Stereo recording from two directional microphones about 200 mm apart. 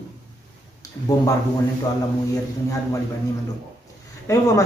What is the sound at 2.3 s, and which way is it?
Speech, 15° left (ahead or behind).